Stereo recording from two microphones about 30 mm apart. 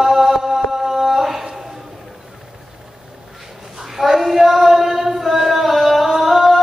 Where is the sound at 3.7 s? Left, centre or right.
Centre.